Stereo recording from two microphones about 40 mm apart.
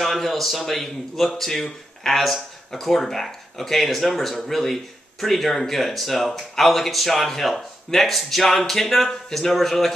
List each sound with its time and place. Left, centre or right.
0.0 s speech: centre